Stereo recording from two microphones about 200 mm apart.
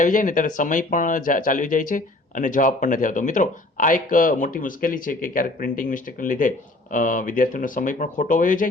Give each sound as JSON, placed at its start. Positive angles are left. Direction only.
{"t": 0.0, "sound": "speech", "side_deg": 40}